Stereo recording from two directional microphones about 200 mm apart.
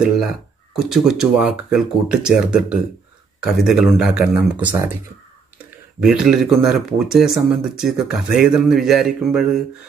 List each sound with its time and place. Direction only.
0.7 s speech: centre (ahead or behind)
6.0 s speech: centre (ahead or behind)